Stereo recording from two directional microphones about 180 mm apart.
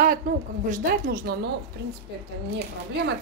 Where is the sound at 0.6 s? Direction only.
45° right (ahead or behind).